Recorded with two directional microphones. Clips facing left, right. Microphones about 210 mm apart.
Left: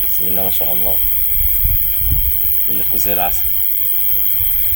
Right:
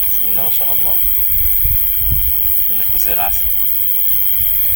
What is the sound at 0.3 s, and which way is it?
Speech, 35° left (ahead or behind).